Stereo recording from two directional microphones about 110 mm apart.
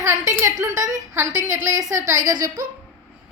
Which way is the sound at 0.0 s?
30° right (ahead or behind).